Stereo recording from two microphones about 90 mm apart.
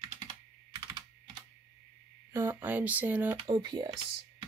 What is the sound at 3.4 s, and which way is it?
Speech, 50° right (ahead or behind).